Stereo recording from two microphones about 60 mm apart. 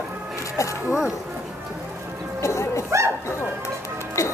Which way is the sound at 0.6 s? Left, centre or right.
Left.